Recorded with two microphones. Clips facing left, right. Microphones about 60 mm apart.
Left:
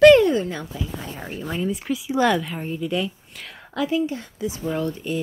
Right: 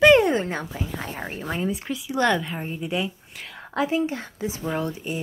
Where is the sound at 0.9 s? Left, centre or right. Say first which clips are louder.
Right 1 dB; right.